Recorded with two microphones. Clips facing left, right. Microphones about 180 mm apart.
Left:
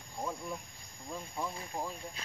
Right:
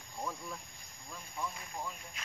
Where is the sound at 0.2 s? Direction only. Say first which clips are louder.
Left 3 dB; 20° left (ahead or behind).